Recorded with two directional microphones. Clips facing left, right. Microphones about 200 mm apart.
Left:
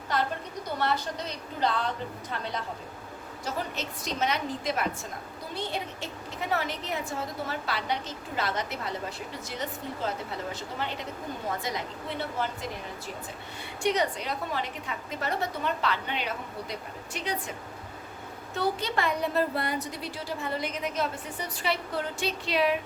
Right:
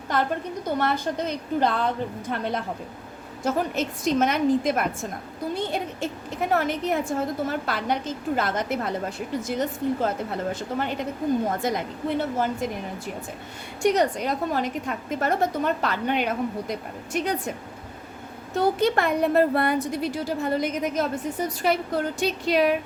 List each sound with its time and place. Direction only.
0.8 s a woman's voice: 50° right (ahead or behind)
13.8 s a woman's voice: 45° right (ahead or behind)
18.5 s a woman's voice: 50° right (ahead or behind)